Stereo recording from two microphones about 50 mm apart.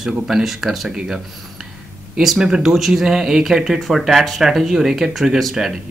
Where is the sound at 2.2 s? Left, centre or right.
Centre.